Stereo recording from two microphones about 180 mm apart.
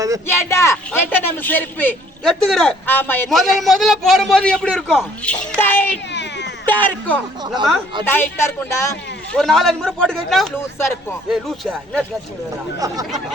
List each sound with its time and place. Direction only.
0.3 s a man's voice: 15° left (ahead or behind)
3.3 s a man's voice: centre (ahead or behind)
6.1 s baby cry: 75° left (ahead or behind)
6.7 s speech: 10° left (ahead or behind)
7.4 s speech: 25° right (ahead or behind)
8.0 s speech: 10° left (ahead or behind)
9.3 s a man's voice: centre (ahead or behind)
12.8 s speech: 20° right (ahead or behind)